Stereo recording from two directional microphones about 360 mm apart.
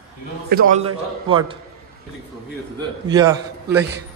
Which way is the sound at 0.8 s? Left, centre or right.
Centre.